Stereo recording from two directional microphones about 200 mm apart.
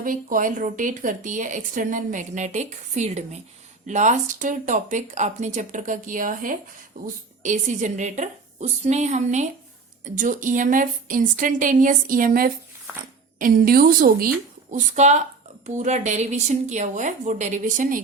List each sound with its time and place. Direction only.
0.0 s a woman's voice: 40° right (ahead or behind)
14.7 s a woman's voice: 35° right (ahead or behind)